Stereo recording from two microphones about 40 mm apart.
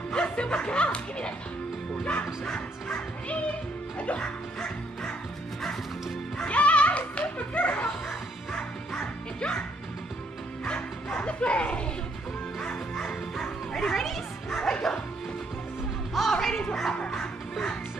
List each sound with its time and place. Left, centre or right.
0.1 s speech: left
2.4 s music: left
4.0 s speech: left
4.6 s music: centre
6.4 s music: left
7.2 s dog: left
8.5 s music: left
10.6 s speech: left
12.9 s speech: centre
16.2 s speech: centre
17.1 s music: centre